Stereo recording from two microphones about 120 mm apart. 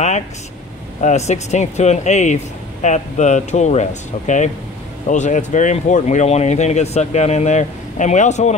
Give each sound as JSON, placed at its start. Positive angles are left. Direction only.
{"t": 1.0, "sound": "speech", "side_deg": 70}
{"t": 5.1, "sound": "speech", "side_deg": 90}